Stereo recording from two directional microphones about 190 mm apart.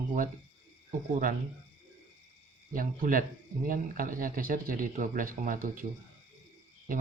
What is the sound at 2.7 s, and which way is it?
A man's voice, 45° right (ahead or behind).